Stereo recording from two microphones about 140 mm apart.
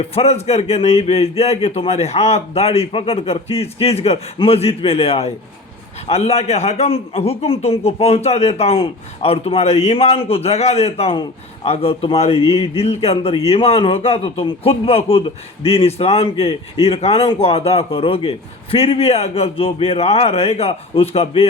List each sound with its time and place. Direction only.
0.0 s a man's voice: 45° left (ahead or behind)